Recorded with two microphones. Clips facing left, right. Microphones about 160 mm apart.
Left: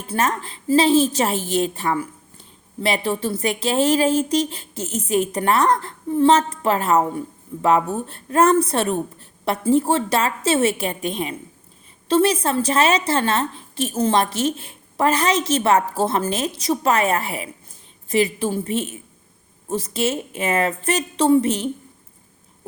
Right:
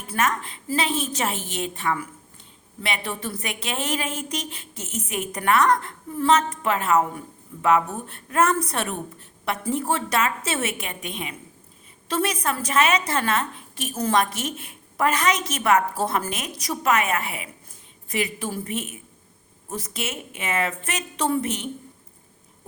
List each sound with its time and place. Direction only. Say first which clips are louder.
0.1 s a woman's voice: left 2 dB; 30° left (ahead or behind)